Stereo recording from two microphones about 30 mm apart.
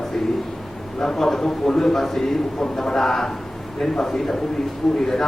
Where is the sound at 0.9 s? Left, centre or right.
Centre.